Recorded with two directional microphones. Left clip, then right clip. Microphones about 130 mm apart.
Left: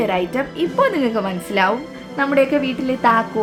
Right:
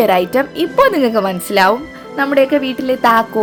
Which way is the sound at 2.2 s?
55° right (ahead or behind).